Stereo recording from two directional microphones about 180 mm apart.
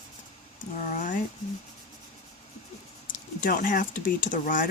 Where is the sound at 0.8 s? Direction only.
45° left (ahead or behind).